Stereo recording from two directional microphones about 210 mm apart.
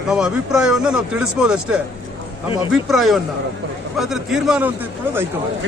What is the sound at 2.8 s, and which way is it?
A man's voice, centre (ahead or behind).